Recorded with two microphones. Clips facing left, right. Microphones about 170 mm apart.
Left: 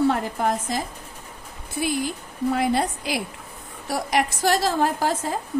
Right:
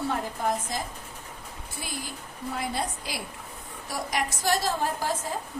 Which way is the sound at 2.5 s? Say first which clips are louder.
Left 9 dB; 70° left (ahead or behind).